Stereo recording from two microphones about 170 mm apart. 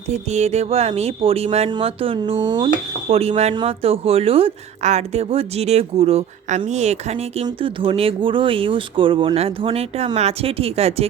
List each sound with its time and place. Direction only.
0.1 s a woman's voice: 40° right (ahead or behind)
3.1 s a woman's voice: 35° right (ahead or behind)